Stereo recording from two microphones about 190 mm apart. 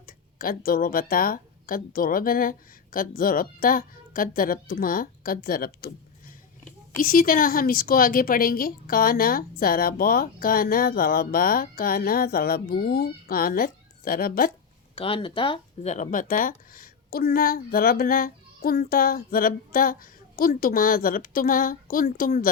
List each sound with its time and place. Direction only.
0.0 s speech: 50° left (ahead or behind)
14.9 s speech: 30° left (ahead or behind); by 22.4 s 50° left (ahead or behind)